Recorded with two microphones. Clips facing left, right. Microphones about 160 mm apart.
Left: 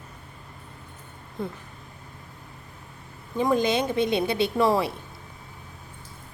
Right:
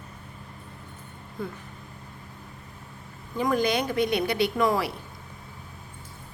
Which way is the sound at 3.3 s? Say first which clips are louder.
Left 2 dB; 20° left (ahead or behind).